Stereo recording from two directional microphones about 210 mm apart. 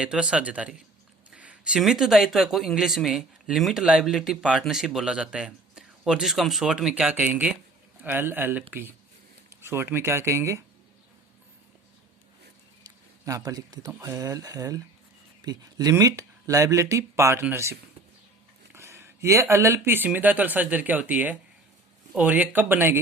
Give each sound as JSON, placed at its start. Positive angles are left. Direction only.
{"t": 0.0, "sound": "speech", "side_deg": -5}
{"t": 12.8, "sound": "speech", "side_deg": -15}